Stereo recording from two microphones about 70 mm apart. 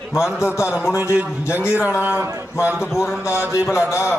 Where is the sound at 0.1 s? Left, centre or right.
Left.